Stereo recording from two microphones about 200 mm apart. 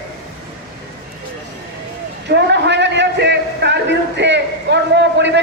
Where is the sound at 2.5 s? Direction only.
60° right (ahead or behind).